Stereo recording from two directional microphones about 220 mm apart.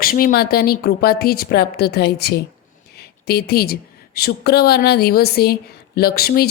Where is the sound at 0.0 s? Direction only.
40° left (ahead or behind).